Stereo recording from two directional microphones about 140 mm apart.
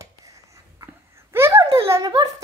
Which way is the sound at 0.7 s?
20° right (ahead or behind).